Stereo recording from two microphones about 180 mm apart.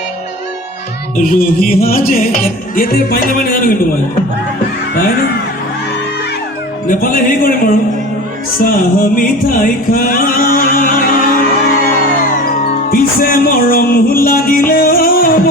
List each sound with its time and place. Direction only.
1.1 s music: 50° left (ahead or behind)
6.8 s music: 50° left (ahead or behind)
8.6 s music: 50° left (ahead or behind)